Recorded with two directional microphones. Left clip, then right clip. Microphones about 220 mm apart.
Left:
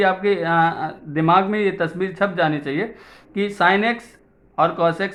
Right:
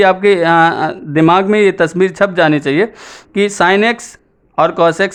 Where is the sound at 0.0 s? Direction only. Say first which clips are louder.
Right 9 dB; 45° right (ahead or behind).